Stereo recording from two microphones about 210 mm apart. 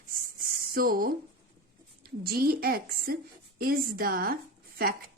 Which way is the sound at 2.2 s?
45° right (ahead or behind).